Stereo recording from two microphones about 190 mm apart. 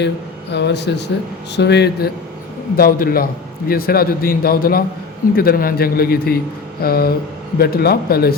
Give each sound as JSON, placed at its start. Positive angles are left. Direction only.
{"t": 0.5, "sound": "a man's voice", "side_deg": 65}